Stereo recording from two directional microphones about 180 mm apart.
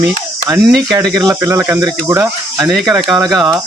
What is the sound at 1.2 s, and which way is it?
Speech, 20° right (ahead or behind).